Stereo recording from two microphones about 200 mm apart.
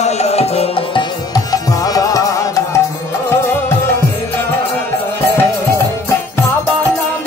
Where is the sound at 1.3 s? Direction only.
20° left (ahead or behind).